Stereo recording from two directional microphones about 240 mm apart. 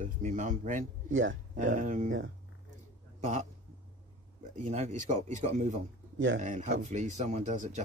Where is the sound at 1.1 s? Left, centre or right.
Right.